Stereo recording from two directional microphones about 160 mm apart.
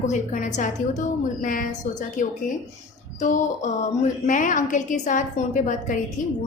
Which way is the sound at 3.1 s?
50° left (ahead or behind).